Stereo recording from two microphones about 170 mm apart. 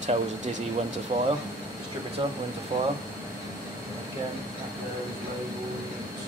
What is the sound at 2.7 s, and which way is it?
Speech, 25° right (ahead or behind).